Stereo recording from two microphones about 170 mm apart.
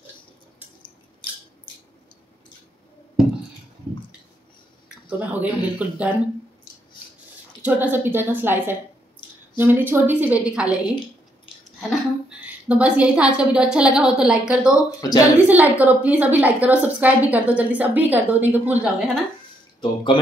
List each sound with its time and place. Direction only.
4.8 s speech: 10° right (ahead or behind)
7.6 s a woman's voice: 10° right (ahead or behind)
9.2 s a sound: 30° left (ahead or behind)
9.6 s a woman's voice: 10° right (ahead or behind)
12.3 s a woman's voice: 10° right (ahead or behind)
19.8 s speech: 30° left (ahead or behind)